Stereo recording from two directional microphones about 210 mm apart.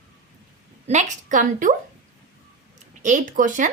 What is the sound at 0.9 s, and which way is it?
Speech, 35° right (ahead or behind).